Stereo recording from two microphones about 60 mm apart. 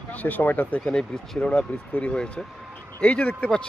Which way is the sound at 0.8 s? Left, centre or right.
Centre.